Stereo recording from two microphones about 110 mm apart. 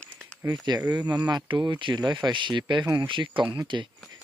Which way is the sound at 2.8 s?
25° right (ahead or behind).